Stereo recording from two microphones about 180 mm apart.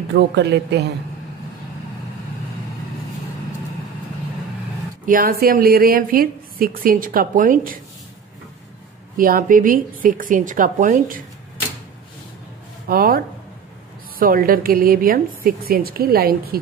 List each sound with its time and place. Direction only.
0.1 s a woman's voice: 70° right (ahead or behind)
5.0 s a woman's voice: 55° right (ahead or behind)
9.1 s a woman's voice: 50° right (ahead or behind)
12.8 s a woman's voice: 55° right (ahead or behind)